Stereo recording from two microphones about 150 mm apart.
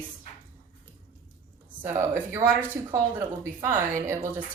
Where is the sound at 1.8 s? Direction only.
15° right (ahead or behind).